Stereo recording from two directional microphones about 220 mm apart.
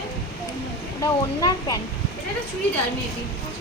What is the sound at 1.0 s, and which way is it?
Speech, 15° left (ahead or behind).